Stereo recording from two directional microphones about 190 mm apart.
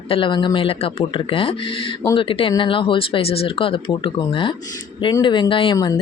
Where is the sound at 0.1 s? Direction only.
25° left (ahead or behind).